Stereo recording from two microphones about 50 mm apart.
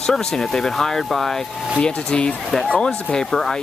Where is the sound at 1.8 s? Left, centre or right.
Left.